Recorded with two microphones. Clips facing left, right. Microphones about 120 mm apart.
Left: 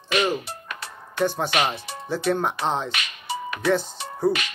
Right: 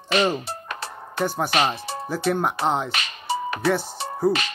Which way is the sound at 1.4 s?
35° right (ahead or behind).